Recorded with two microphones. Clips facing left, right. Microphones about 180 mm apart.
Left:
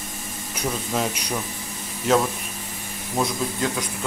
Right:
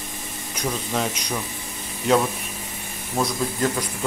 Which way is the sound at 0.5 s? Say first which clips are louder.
Even; 5° left (ahead or behind).